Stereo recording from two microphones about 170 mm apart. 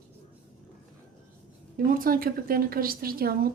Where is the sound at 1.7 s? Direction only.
55° right (ahead or behind).